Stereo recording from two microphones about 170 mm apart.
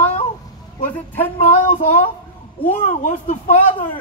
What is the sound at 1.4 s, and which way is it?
Speech, 50° left (ahead or behind).